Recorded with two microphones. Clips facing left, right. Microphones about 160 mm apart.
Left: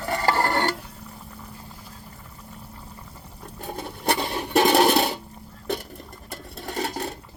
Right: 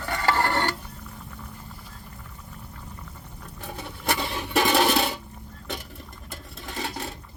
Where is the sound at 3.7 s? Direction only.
40° left (ahead or behind).